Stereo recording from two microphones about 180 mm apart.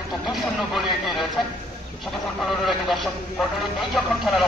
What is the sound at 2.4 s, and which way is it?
A man's voice, centre (ahead or behind).